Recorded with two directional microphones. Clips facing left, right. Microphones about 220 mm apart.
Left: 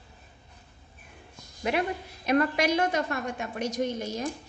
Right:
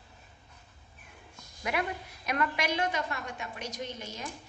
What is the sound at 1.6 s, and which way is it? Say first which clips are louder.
A woman's voice: left 5 dB; 30° left (ahead or behind).